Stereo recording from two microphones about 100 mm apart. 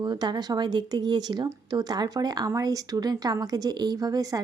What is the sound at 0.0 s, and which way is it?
A woman's voice, 45° right (ahead or behind).